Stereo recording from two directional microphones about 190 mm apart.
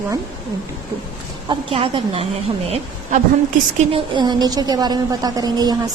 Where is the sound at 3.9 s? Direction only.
25° right (ahead or behind).